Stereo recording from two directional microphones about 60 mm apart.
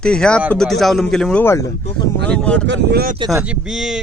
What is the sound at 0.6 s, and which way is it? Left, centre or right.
Speech, centre.